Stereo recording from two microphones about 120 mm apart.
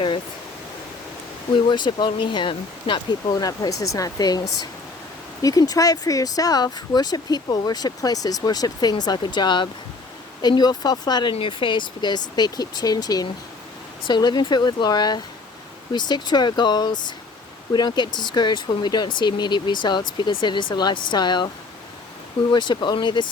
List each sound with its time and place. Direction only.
1.6 s speech: 40° left (ahead or behind)
22.5 s speech: 40° left (ahead or behind)